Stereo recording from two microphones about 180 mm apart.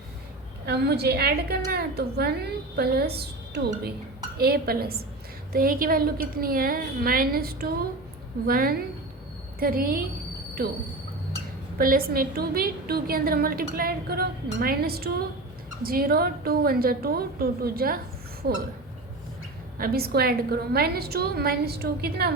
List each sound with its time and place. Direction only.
0.6 s a woman's voice: 65° right (ahead or behind)
11.8 s a woman's voice: 55° right (ahead or behind)
19.8 s a woman's voice: 60° right (ahead or behind)